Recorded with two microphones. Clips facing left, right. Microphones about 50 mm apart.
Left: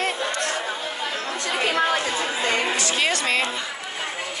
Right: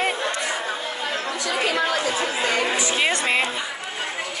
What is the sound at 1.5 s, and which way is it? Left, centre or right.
Chatter, left.